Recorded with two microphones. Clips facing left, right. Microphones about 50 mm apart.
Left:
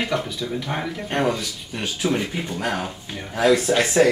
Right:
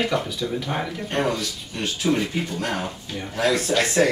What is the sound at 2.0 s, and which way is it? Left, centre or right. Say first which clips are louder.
Speech: right 1 dB; centre.